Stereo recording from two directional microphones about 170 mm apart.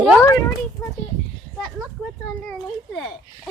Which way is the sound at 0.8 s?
10° left (ahead or behind).